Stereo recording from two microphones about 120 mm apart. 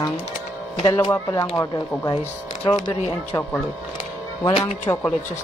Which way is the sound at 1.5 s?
25° left (ahead or behind).